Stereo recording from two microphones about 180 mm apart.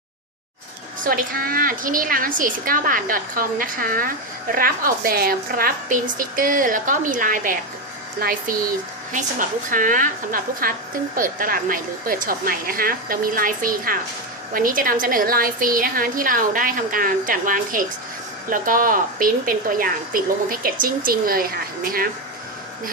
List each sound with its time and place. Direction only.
1.0 s a woman's voice: 55° right (ahead or behind)